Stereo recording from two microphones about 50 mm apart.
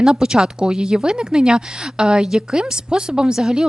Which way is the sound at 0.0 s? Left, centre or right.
Centre.